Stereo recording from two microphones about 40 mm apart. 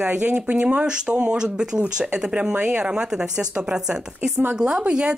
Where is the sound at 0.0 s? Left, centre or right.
Right.